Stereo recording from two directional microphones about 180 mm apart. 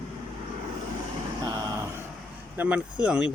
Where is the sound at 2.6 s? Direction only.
5° right (ahead or behind).